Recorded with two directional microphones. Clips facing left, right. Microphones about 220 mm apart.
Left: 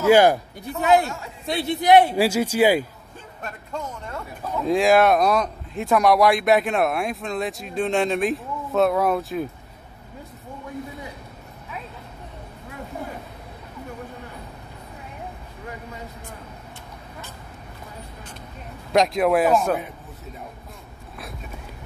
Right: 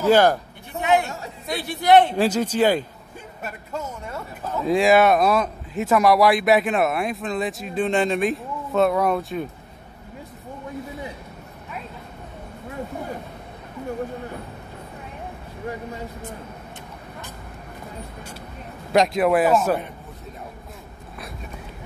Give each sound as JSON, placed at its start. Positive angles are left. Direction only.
{"t": 0.0, "sound": "speech", "side_deg": 10}
{"t": 0.7, "sound": "speech", "side_deg": 35}
{"t": 1.4, "sound": "speech", "side_deg": 25}
{"t": 3.4, "sound": "speech", "side_deg": -5}
{"t": 18.9, "sound": "speech", "side_deg": 0}